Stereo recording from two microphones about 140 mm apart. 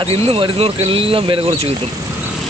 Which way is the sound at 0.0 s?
45° right (ahead or behind).